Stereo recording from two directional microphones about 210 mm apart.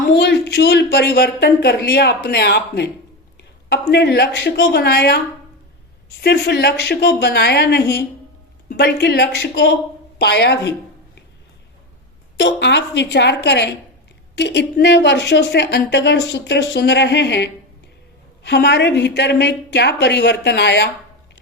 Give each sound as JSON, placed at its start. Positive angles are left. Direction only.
{"t": 0.1, "sound": "speech", "side_deg": 55}
{"t": 6.2, "sound": "a woman's voice", "side_deg": 50}
{"t": 12.4, "sound": "a woman's voice", "side_deg": 55}